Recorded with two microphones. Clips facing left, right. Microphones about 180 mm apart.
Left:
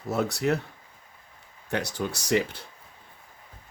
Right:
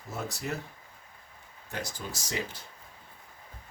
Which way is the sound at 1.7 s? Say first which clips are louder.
Left 8 dB; 70° left (ahead or behind).